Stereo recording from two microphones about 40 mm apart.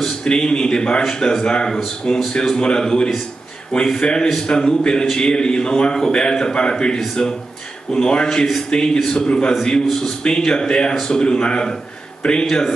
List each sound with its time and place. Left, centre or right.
0.2 s a man's voice: left